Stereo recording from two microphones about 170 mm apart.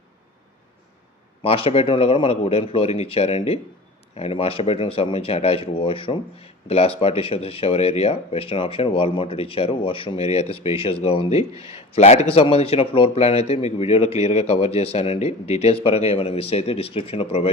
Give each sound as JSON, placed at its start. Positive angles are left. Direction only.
{"t": 1.4, "sound": "a man's voice", "side_deg": 35}